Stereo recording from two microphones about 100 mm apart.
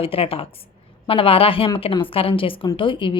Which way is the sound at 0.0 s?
70° left (ahead or behind).